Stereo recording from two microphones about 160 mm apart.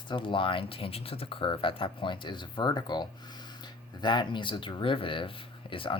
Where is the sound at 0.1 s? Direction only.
30° left (ahead or behind).